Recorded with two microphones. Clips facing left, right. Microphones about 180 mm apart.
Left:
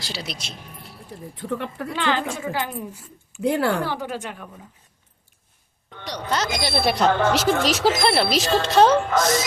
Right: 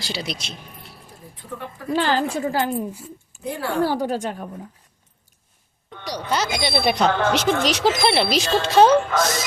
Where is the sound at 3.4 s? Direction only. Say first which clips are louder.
Left 8 dB; 75° left (ahead or behind).